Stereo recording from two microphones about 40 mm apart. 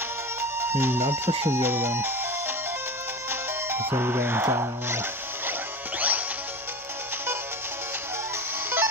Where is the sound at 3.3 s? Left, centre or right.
Right.